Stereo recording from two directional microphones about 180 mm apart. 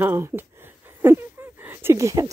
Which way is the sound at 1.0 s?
10° right (ahead or behind).